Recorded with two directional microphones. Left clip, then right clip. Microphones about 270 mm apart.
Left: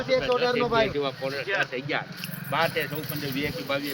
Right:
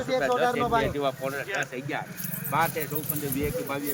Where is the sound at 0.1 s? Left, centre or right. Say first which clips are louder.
Left 1 dB; centre.